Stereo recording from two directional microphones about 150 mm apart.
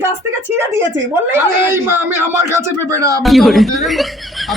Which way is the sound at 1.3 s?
15° right (ahead or behind).